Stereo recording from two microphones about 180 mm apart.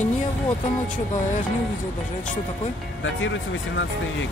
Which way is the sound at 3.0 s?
90° left.